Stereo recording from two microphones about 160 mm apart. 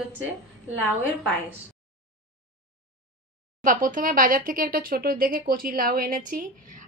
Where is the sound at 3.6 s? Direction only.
55° right (ahead or behind).